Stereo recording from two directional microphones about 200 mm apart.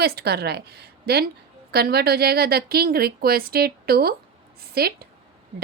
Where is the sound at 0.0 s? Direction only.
50° right (ahead or behind).